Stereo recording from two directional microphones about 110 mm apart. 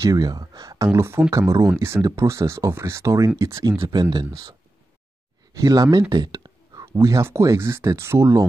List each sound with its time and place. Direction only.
0.0 s speech: 35° right (ahead or behind)
0.9 s speech: 25° right (ahead or behind)
4.0 s speech: 45° right (ahead or behind)
6.0 s a sound: 40° right (ahead or behind)
7.0 s speech: 25° right (ahead or behind)